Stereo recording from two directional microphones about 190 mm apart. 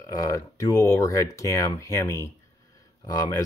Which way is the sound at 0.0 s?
20° left (ahead or behind).